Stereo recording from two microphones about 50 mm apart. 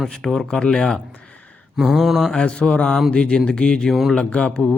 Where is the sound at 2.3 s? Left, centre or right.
Centre.